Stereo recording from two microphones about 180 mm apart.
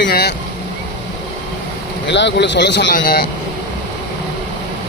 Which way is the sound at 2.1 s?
80° left.